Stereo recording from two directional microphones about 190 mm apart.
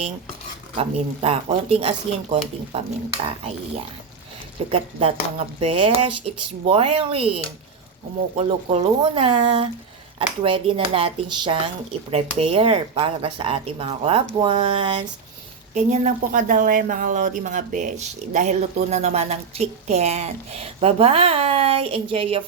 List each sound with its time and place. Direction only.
0.8 s speech: 30° right (ahead or behind)
4.7 s a woman's voice: 30° right (ahead or behind)
8.4 s speech: 30° right (ahead or behind)
15.7 s a woman's voice: 40° right (ahead or behind)